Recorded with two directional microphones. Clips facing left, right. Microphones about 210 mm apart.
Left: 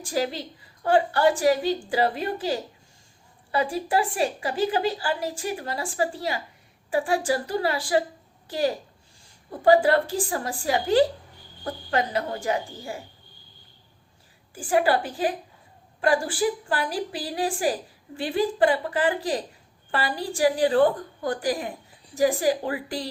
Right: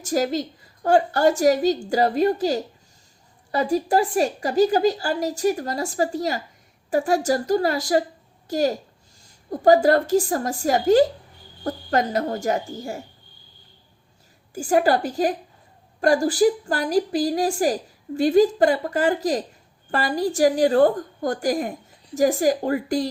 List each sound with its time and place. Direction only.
0.0 s a woman's voice: 45° right (ahead or behind)
14.5 s a woman's voice: 40° right (ahead or behind)